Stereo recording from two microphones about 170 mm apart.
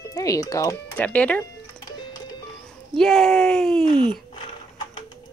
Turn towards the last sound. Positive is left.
turn(degrees=5)  # may be behind; listen again after turning